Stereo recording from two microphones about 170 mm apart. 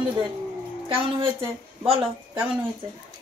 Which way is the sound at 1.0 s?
30° right (ahead or behind).